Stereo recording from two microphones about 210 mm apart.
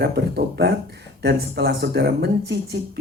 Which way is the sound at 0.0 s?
50° right (ahead or behind).